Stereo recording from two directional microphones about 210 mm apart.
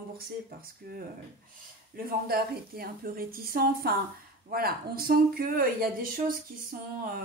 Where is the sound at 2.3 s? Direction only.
45° right (ahead or behind).